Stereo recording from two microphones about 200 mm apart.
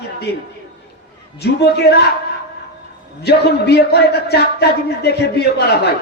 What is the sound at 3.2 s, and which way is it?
A man's voice, 55° left (ahead or behind).